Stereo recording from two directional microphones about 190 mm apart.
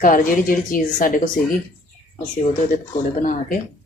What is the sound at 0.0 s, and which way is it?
Speech, 45° left (ahead or behind).